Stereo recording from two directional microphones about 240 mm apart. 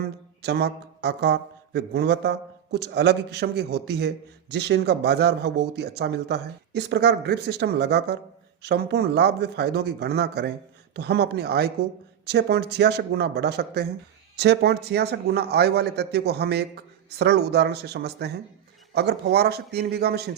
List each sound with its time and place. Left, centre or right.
0.4 s speech: right